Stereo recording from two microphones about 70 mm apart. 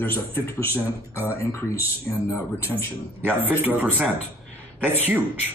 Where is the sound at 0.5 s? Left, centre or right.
Left.